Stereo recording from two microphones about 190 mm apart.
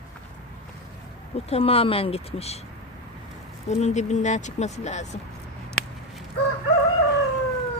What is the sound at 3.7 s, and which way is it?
Speech, 35° left (ahead or behind).